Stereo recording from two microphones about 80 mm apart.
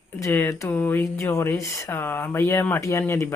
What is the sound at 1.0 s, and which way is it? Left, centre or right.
Speech, left.